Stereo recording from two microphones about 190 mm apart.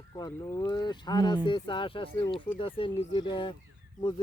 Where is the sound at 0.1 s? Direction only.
20° left (ahead or behind).